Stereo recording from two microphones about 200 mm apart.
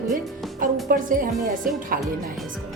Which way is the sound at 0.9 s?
45° right (ahead or behind).